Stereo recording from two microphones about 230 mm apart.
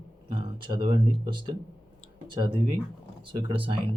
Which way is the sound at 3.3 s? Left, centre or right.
Right.